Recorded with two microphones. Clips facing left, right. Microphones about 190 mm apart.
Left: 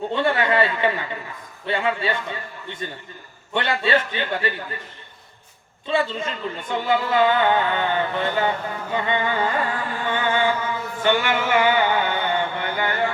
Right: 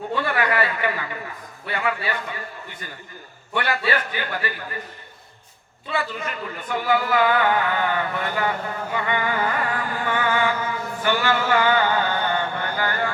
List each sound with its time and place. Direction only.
0.1 s speech: 25° left (ahead or behind)
5.9 s speech: 25° left (ahead or behind)
11.0 s a sound: 20° left (ahead or behind)